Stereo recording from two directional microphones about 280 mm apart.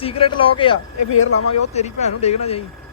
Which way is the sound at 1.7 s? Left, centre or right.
Left.